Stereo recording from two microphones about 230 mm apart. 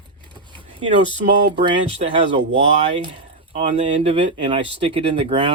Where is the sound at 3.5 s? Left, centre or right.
Right.